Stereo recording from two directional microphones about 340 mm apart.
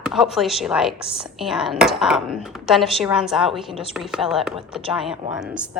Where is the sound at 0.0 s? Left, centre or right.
Centre.